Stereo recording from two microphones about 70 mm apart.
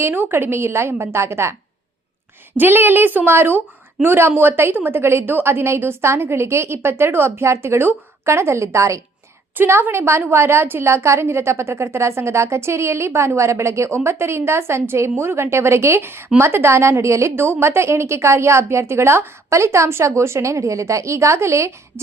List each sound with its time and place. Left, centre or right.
0.0 s a woman's voice: right
2.6 s a woman's voice: right
9.6 s a woman's voice: right